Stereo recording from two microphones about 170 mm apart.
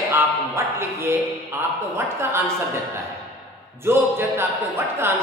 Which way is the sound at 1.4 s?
15° right (ahead or behind).